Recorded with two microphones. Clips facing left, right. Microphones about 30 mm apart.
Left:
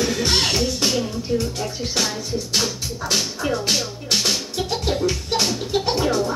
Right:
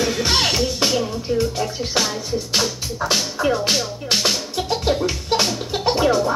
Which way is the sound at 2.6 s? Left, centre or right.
Centre.